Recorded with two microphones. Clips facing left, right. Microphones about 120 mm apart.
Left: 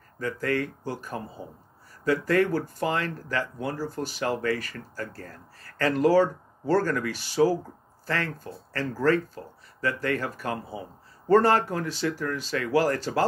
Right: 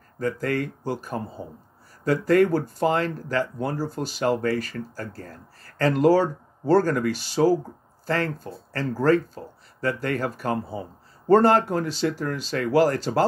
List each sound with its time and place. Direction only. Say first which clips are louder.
0.2 s speech: right 2 dB; 35° right (ahead or behind)
2.0 s speech: right 4 dB; 40° right (ahead or behind)
8.7 s speech: right 3 dB; 30° right (ahead or behind)
11.2 s speech: right 3 dB; 30° right (ahead or behind)